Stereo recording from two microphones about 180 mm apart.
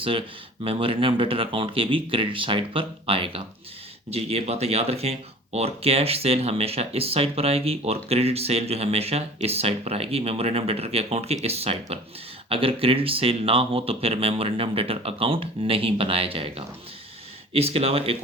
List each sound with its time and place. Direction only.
0.0 s speech: 30° right (ahead or behind)